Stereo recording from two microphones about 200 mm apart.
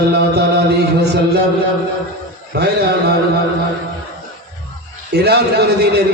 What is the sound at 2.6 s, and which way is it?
Mantra, 55° right (ahead or behind).